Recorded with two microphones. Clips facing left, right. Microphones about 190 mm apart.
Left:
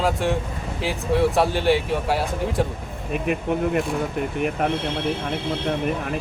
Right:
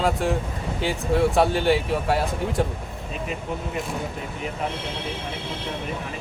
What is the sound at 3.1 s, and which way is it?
Speech, 60° left (ahead or behind).